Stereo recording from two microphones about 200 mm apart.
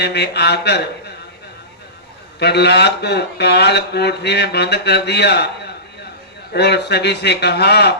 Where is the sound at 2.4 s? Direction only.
55° left (ahead or behind).